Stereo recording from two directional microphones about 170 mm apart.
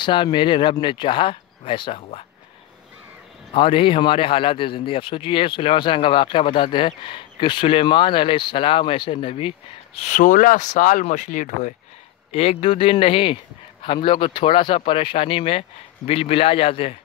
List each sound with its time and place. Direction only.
0.0 s speech: 30° left (ahead or behind)
3.5 s a man's voice: 30° left (ahead or behind)
9.9 s speech: 45° left (ahead or behind)
12.3 s a man's voice: 35° left (ahead or behind)